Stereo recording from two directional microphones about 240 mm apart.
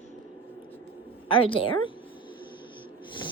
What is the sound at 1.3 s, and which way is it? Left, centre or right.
Music, left.